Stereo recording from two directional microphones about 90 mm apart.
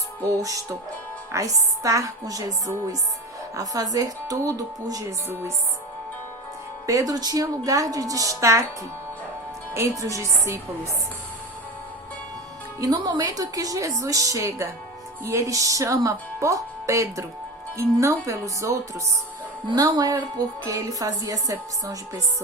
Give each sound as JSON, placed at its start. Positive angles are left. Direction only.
{"t": 0.3, "sound": "speech", "side_deg": -40}
{"t": 5.3, "sound": "speech", "side_deg": -30}
{"t": 6.8, "sound": "speech", "side_deg": -40}
{"t": 9.7, "sound": "speech", "side_deg": -35}
{"t": 12.8, "sound": "speech", "side_deg": -45}